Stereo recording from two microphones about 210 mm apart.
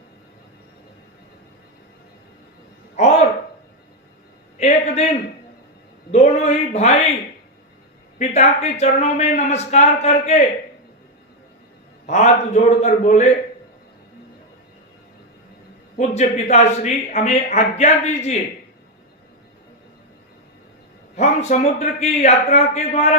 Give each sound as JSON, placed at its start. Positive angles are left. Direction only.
{"t": 2.9, "sound": "speech", "side_deg": 35}
{"t": 4.5, "sound": "a sound", "side_deg": 30}
{"t": 6.1, "sound": "a man's voice", "side_deg": 30}
{"t": 8.2, "sound": "a man's voice", "side_deg": 30}
{"t": 12.0, "sound": "a man's voice", "side_deg": 30}
{"t": 16.0, "sound": "a man's voice", "side_deg": 35}
{"t": 21.2, "sound": "a man's voice", "side_deg": 35}